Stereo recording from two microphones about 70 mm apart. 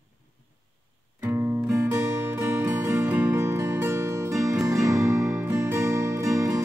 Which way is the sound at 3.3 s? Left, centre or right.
Right.